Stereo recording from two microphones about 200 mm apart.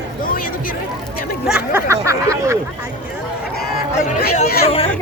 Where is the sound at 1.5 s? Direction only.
10° right (ahead or behind).